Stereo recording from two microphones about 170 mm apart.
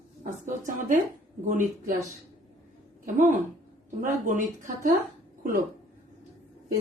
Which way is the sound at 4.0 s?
50° right (ahead or behind).